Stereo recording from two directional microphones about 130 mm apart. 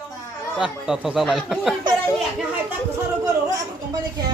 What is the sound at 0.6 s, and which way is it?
A man's voice, 5° right (ahead or behind).